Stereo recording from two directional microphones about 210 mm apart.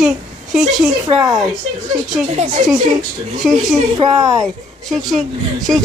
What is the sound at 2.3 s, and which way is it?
Speech, 35° right (ahead or behind).